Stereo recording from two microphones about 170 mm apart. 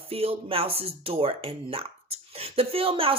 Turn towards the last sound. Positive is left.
turn(degrees=-30)  # may be behind; listen again after turning